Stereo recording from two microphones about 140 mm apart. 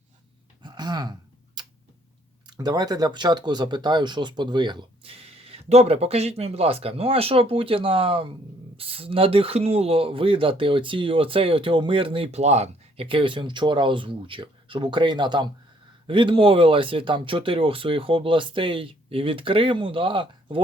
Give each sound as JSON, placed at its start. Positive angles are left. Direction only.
{"t": 0.6, "sound": "a sound", "side_deg": -30}
{"t": 1.6, "sound": "tick-tock", "side_deg": -30}
{"t": 2.5, "sound": "speech", "side_deg": -30}